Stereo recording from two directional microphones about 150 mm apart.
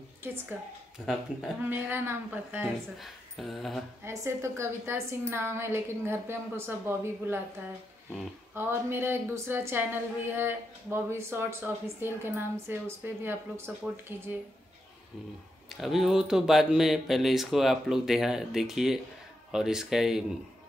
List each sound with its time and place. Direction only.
0.2 s speech: 15° right (ahead or behind)
3.0 s speech: centre (ahead or behind)
4.0 s speech: 20° right (ahead or behind)
8.5 s speech: 15° right (ahead or behind)
15.7 s speech: centre (ahead or behind)